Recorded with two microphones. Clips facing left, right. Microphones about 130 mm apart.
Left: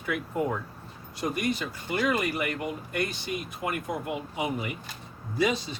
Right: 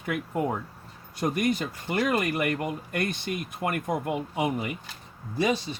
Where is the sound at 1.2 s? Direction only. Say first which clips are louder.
Right 3 dB; 50° right (ahead or behind).